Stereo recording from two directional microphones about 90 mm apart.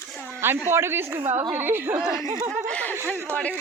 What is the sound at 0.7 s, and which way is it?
Speech, 25° right (ahead or behind).